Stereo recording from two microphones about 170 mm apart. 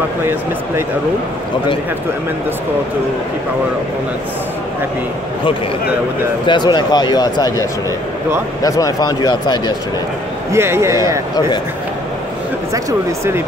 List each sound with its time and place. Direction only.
0.2 s a man's voice: 15° right (ahead or behind)
6.4 s speech: 25° left (ahead or behind)
8.6 s speech: 20° left (ahead or behind)
10.5 s a man's voice: 15° right (ahead or behind)
12.7 s a man's voice: 15° right (ahead or behind)